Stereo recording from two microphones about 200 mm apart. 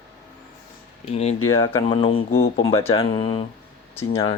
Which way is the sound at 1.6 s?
25° left (ahead or behind).